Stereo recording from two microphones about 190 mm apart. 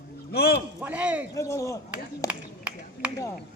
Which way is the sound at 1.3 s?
15° left (ahead or behind).